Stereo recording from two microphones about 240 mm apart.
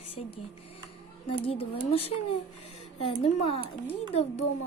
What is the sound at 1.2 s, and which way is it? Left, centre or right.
Speech, left.